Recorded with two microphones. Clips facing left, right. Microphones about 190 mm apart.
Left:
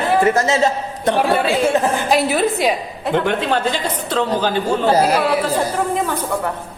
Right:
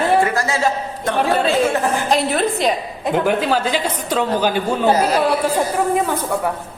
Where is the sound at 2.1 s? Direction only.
5° left (ahead or behind); by 4.9 s 10° right (ahead or behind).